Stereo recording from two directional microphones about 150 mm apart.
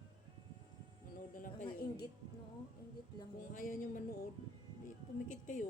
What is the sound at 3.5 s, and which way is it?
Speech, 65° left (ahead or behind).